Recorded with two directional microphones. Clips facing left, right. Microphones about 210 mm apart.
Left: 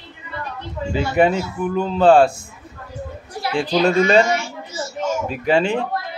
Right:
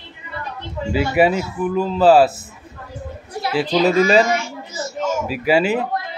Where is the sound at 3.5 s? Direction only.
5° right (ahead or behind).